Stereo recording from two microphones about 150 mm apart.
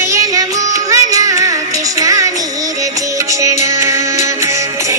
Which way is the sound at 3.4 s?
20° right (ahead or behind).